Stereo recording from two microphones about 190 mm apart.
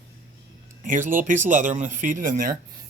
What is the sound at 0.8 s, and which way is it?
Speech, 45° right (ahead or behind).